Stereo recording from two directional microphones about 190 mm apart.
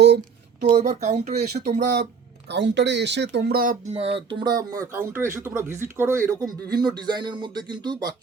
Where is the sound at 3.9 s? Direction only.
30° right (ahead or behind).